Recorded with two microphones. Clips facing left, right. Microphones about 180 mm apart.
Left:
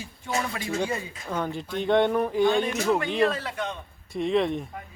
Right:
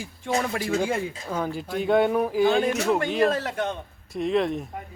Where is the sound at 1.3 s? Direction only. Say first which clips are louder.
Left 1 dB; 5° right (ahead or behind).